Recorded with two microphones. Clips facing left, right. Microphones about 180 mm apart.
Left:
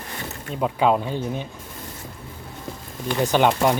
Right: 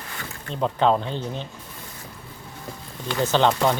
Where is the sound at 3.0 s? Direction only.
15° left (ahead or behind).